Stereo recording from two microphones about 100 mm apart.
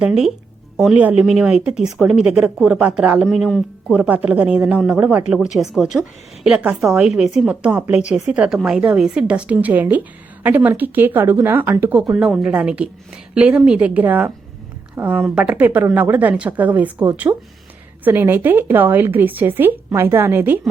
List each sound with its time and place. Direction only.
0.0 s a woman's voice: 5° right (ahead or behind)
3.2 s a woman's voice: 5° left (ahead or behind)
3.9 s a woman's voice: 15° right (ahead or behind)
12.1 s a woman's voice: 5° right (ahead or behind)